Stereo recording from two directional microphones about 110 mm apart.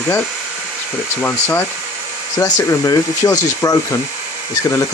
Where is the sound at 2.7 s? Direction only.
30° left (ahead or behind).